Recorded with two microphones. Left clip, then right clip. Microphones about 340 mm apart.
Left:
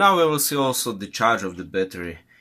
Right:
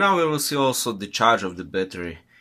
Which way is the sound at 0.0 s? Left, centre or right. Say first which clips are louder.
Left 3 dB; centre.